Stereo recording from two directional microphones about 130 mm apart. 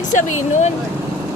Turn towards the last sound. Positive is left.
turn(degrees=70)  # may be behind; listen again after turning